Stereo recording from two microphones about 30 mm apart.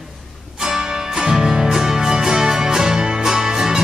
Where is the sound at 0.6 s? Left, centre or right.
Right.